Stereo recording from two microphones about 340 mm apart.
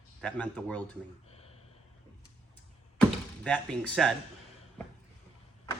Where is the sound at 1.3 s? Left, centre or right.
Centre.